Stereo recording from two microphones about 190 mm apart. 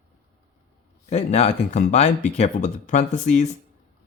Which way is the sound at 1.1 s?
35° left (ahead or behind).